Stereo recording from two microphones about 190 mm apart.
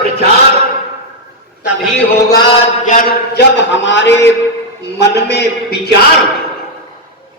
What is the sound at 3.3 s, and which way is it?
A man's voice, 65° left (ahead or behind).